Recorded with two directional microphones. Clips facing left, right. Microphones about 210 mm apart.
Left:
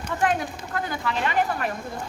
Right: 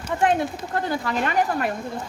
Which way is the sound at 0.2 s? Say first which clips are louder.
Right 3 dB; 25° right (ahead or behind).